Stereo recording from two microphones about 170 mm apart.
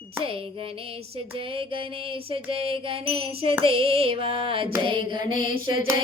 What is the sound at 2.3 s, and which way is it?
Music, 35° right (ahead or behind).